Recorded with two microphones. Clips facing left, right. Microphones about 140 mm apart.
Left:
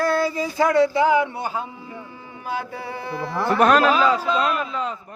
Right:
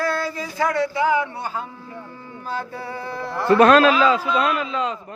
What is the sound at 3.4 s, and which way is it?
Speech, 90° right.